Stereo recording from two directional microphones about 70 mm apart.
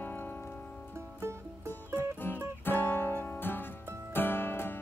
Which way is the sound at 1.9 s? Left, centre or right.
Left.